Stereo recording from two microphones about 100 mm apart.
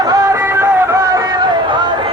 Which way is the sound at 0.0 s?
35° right (ahead or behind).